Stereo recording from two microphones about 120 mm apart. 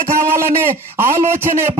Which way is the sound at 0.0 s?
20° right (ahead or behind).